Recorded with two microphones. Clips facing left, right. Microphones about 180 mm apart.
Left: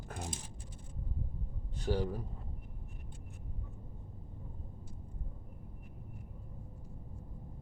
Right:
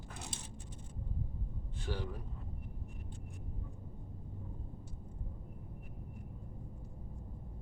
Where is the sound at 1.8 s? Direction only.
40° left (ahead or behind).